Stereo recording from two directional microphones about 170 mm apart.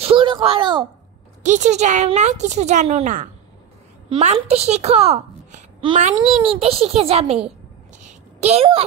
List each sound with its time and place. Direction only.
0.0 s speech: 30° right (ahead or behind)
1.4 s a woman's voice: 45° right (ahead or behind)
8.0 s a sound: 40° right (ahead or behind)